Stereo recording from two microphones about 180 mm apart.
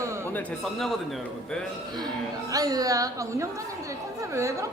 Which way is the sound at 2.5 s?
20° right (ahead or behind).